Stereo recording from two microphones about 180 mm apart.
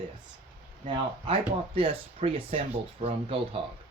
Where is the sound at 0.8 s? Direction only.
25° right (ahead or behind).